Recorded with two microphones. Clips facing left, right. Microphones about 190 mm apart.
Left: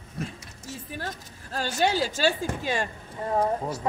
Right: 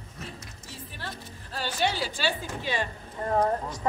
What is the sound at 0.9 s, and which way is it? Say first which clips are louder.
Speech: left 3 dB; 45° left (ahead or behind).